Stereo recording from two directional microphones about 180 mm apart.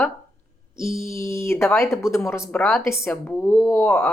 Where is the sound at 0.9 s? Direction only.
15° left (ahead or behind).